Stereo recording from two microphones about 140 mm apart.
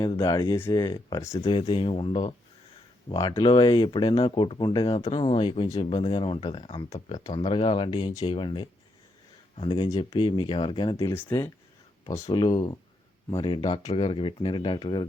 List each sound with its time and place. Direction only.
0.0 s speech: 30° left (ahead or behind)
1.5 s speech: 40° left (ahead or behind)
10.9 s speech: 20° left (ahead or behind)
12.3 s speech: 35° left (ahead or behind)